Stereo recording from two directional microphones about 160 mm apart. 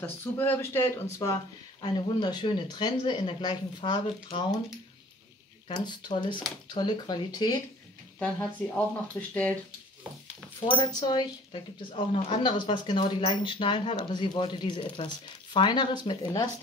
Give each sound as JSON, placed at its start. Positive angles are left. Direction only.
{"t": 0.0, "sound": "speech", "side_deg": 15}
{"t": 5.7, "sound": "speech", "side_deg": 30}
{"t": 8.2, "sound": "speech", "side_deg": 10}
{"t": 10.8, "sound": "speech", "side_deg": 25}